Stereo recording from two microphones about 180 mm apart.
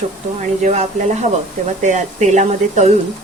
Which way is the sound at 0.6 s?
40° right (ahead or behind).